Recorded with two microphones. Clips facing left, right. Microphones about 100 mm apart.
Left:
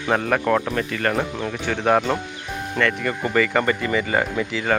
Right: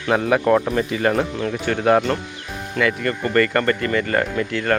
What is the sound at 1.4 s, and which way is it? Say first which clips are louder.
Speech: right 3 dB; 5° left (ahead or behind).